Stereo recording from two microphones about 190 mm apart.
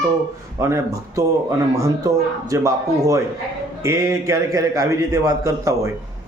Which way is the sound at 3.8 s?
15° right (ahead or behind).